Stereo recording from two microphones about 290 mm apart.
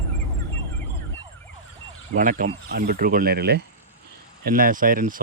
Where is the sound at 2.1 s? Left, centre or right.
Right.